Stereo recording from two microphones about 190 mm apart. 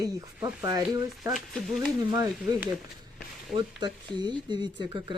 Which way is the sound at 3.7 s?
25° right (ahead or behind).